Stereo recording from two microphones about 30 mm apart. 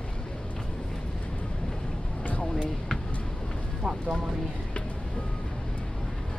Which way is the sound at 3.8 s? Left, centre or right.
Right.